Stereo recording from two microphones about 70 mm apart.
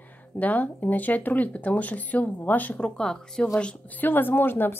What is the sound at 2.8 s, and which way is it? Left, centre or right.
A woman's voice, centre.